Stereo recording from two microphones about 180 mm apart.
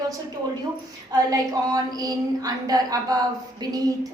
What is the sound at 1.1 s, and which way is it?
A woman's voice, 20° right (ahead or behind).